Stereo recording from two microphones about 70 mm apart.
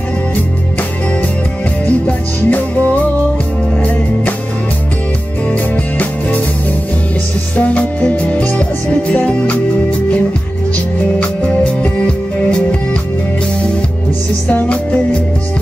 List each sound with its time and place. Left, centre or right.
2.0 s music: left
5.5 s music: left
7.5 s music: left
14.5 s music: centre